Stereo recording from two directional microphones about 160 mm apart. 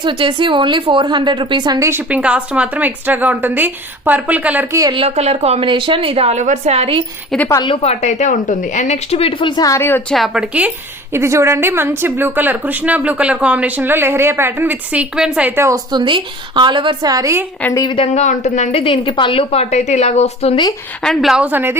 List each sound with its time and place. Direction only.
0.0 s a woman's voice: 30° right (ahead or behind)
1.9 s a woman's voice: 10° right (ahead or behind)
4.8 s a woman's voice: 25° right (ahead or behind)
5.0 s a woman's voice: 40° right (ahead or behind)
7.4 s a woman's voice: 20° left (ahead or behind)
7.7 s a woman's voice: 40° left (ahead or behind); by 10.2 s 15° left (ahead or behind)
10.2 s a woman's voice: 5° right (ahead or behind); by 17.4 s 20° right (ahead or behind)
17.6 s a woman's voice: 20° left (ahead or behind)
17.9 s a woman's voice: 40° left (ahead or behind)
21.0 s a woman's voice: centre (ahead or behind)